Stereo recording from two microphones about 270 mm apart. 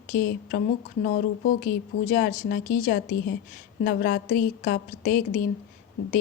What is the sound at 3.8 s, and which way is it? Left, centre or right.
A woman's voice, left.